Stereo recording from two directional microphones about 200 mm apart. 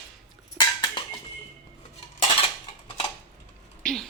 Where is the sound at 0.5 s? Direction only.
20° left (ahead or behind).